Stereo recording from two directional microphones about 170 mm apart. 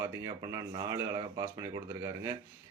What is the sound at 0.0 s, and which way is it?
Speech, 20° right (ahead or behind).